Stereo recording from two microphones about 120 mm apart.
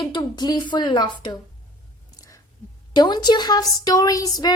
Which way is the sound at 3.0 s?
35° left (ahead or behind).